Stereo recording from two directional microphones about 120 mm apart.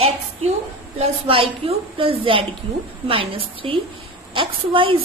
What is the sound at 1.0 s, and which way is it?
A woman's voice, 50° right (ahead or behind).